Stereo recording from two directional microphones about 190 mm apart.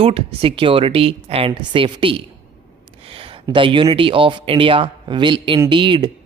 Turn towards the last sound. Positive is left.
turn(degrees=-25)  # may be behind; listen again after turning